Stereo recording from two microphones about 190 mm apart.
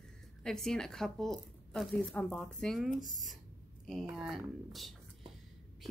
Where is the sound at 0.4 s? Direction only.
Centre (ahead or behind).